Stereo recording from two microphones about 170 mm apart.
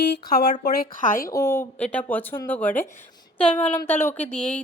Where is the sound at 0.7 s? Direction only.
55° left (ahead or behind).